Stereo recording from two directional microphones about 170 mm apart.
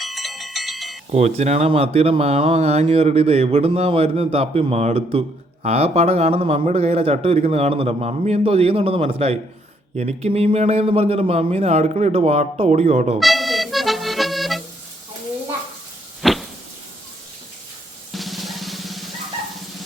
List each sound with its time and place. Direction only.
0.0 s music: centre (ahead or behind)
1.1 s speech: 40° right (ahead or behind)
13.1 s accordion: centre (ahead or behind)
16.2 s a sound: centre (ahead or behind)
18.1 s drum: centre (ahead or behind)